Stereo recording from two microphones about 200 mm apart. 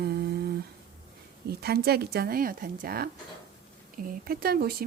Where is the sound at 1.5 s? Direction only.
50° right (ahead or behind).